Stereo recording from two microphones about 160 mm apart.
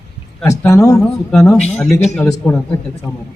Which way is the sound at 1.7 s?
5° left (ahead or behind).